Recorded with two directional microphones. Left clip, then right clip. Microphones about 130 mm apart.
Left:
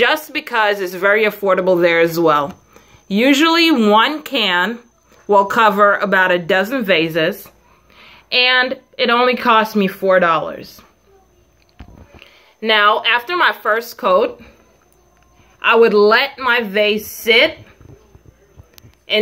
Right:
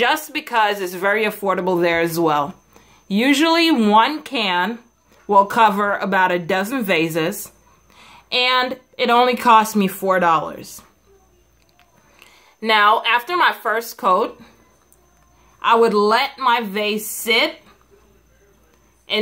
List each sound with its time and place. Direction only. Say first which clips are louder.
0.0 s speech: left 3 dB; 30° right (ahead or behind)
12.2 s speech: left 4 dB; 30° right (ahead or behind)
15.6 s speech: left 4 dB; 25° right (ahead or behind)